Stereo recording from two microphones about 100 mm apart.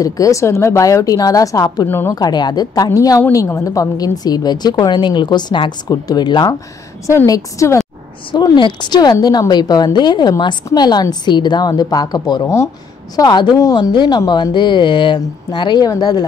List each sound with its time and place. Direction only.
0.0 s a woman's voice: 35° left (ahead or behind)
1.9 s a woman's voice: 25° left (ahead or behind)
2.1 s a woman's voice: 45° left (ahead or behind)
7.2 s a woman's voice: 35° left (ahead or behind)
8.3 s speech: 50° left (ahead or behind)